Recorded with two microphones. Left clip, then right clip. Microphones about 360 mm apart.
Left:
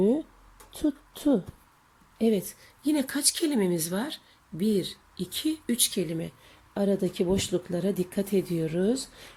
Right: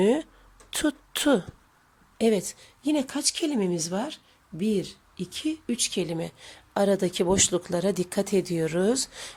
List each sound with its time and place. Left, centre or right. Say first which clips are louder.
0.0 s a woman's voice: right 2 dB; right
2.1 s a woman's voice: right 3 dB; centre